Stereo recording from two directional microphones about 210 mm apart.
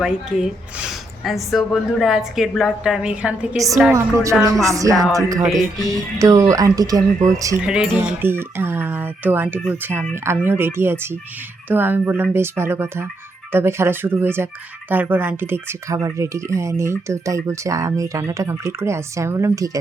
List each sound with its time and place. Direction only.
0.0 s speech: 5° right (ahead or behind)
3.6 s speech: 15° right (ahead or behind)
4.9 s speech: centre (ahead or behind)
5.3 s speech: 15° right (ahead or behind)
7.6 s speech: 5° right (ahead or behind)